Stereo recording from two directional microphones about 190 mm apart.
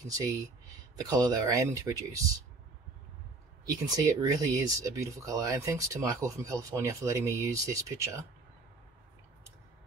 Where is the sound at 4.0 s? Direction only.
15° right (ahead or behind).